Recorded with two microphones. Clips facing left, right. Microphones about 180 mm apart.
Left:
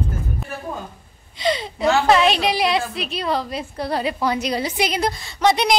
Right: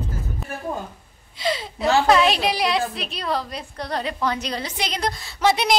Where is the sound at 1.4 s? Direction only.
Centre (ahead or behind).